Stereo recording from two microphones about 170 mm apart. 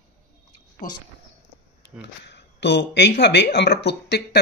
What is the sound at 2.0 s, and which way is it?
Speech, 90° left.